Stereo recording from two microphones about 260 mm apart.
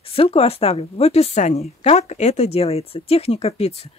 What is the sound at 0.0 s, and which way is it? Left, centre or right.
Speech, left.